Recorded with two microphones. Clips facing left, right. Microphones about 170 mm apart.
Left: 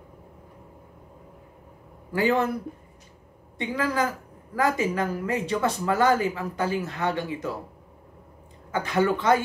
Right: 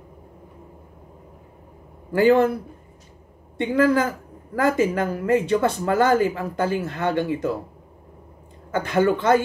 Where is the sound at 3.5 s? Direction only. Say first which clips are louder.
Right 8 dB; 50° right (ahead or behind).